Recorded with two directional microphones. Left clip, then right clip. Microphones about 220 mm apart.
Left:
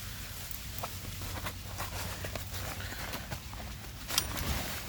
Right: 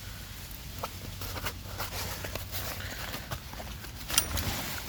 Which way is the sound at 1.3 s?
45° right (ahead or behind).